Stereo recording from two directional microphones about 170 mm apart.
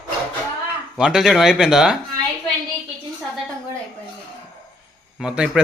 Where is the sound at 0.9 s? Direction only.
5° right (ahead or behind).